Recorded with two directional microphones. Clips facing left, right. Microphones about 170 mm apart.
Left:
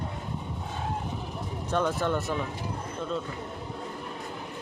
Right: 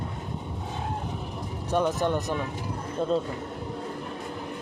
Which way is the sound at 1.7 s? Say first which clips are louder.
Right 2 dB; 15° right (ahead or behind).